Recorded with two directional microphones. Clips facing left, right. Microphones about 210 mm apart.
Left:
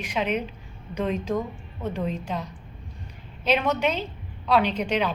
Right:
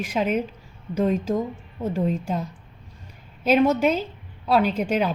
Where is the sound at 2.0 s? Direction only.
45° right (ahead or behind).